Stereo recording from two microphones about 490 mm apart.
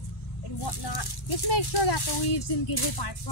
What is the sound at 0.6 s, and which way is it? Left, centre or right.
Speech, left.